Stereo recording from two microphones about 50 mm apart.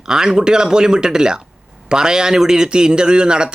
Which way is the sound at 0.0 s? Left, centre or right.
Centre.